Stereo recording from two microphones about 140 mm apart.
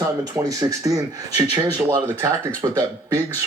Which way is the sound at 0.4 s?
25° right (ahead or behind).